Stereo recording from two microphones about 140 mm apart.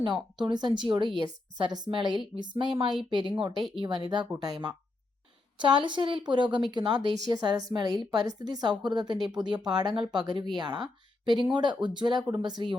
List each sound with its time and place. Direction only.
0.0 s a woman's voice: 35° right (ahead or behind)